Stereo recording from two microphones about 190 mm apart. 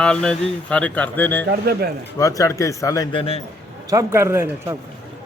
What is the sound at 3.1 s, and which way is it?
Speech, 30° left (ahead or behind).